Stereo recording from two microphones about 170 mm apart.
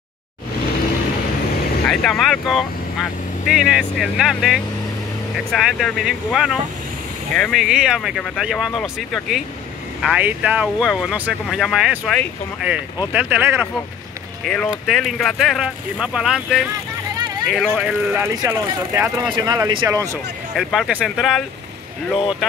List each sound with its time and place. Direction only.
1.9 s speech: centre (ahead or behind)
14.4 s speech: centre (ahead or behind)
18.3 s speech: 20° right (ahead or behind)
20.5 s speech: centre (ahead or behind)